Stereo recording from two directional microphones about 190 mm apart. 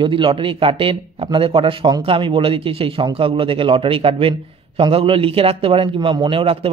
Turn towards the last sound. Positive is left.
turn(degrees=-30)  # may be behind; listen again after turning